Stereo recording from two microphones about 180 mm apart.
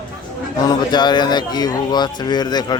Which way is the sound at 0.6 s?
25° left (ahead or behind).